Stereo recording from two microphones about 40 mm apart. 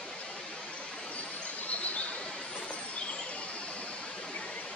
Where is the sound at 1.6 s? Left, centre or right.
Left.